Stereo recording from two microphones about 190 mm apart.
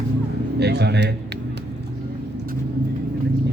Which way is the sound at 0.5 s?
60° right (ahead or behind).